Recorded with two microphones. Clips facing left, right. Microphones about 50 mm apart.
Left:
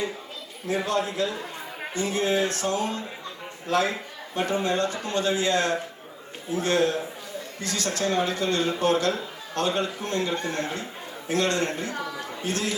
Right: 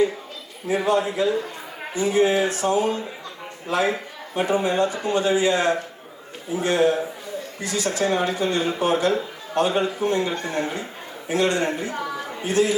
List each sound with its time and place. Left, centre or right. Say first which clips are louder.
0.7 s speech: right 5 dB; centre